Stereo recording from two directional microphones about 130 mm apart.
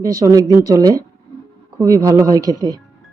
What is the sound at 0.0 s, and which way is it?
Speech, 25° right (ahead or behind).